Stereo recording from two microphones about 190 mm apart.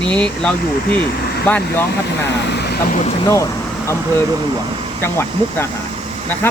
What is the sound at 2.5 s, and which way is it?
Vehicle, 60° left (ahead or behind).